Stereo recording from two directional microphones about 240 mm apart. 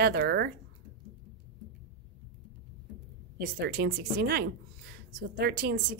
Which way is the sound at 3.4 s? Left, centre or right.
Right.